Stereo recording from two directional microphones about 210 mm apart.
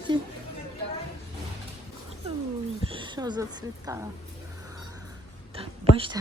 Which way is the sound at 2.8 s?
25° right (ahead or behind).